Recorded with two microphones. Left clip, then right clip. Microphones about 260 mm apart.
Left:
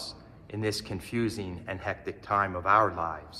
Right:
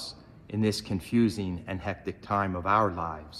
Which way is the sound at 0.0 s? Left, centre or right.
Right.